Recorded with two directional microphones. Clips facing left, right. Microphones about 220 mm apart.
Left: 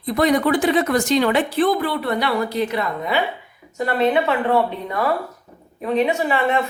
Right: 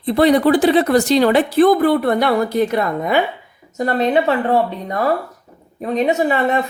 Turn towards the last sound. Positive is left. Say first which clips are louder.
# right 3 dB
turn(degrees=-40)  # may be behind; listen again after turning